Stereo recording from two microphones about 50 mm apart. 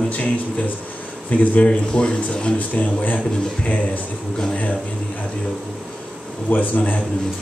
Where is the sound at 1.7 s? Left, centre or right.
Centre.